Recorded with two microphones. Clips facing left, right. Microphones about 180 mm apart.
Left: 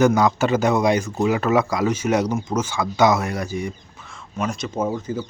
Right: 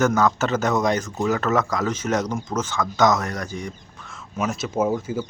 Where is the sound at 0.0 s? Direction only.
10° left (ahead or behind).